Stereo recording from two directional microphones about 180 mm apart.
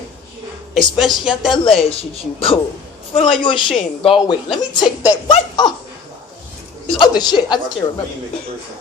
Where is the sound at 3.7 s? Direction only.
30° left (ahead or behind).